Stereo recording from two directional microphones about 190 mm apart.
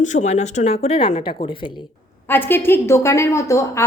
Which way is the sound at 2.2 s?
10° left (ahead or behind).